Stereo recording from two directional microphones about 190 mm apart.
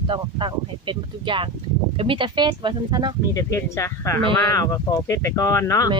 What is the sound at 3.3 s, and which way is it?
Speech, 15° left (ahead or behind).